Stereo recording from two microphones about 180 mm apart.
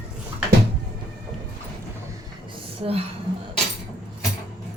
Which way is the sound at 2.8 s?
30° right (ahead or behind).